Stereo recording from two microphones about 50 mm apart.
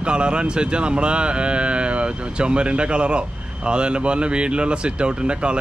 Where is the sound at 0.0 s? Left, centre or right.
Right.